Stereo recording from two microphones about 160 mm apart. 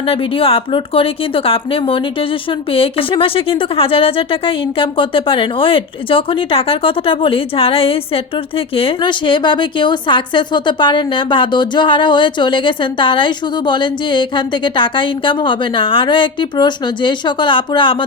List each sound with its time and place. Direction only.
0.0 s speech: 35° left (ahead or behind)